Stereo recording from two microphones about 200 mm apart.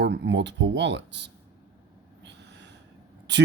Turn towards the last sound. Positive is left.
turn(degrees=-60)  # may be behind; listen again after turning